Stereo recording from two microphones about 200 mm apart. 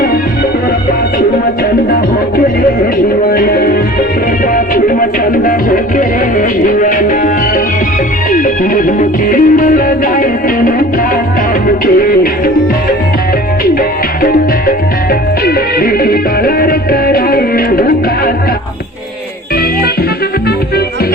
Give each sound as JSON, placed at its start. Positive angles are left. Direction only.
{"t": 3.2, "sound": "music", "side_deg": 50}
{"t": 11.9, "sound": "music", "side_deg": 45}
{"t": 14.2, "sound": "music", "side_deg": 45}